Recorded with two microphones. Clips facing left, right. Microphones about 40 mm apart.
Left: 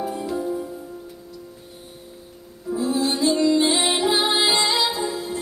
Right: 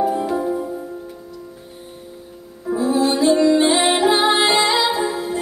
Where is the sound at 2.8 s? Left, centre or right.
Centre.